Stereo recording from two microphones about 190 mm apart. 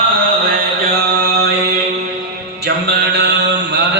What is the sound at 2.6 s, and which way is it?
Mantra, 60° right (ahead or behind).